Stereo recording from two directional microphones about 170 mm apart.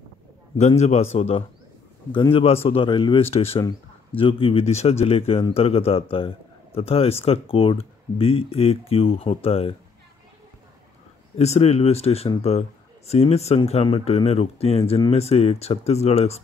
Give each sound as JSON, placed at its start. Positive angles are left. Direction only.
{"t": 0.6, "sound": "speech", "side_deg": 40}
{"t": 11.3, "sound": "speech", "side_deg": 40}